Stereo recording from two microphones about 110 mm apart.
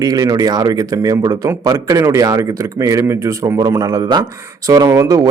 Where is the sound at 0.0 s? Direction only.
35° right (ahead or behind).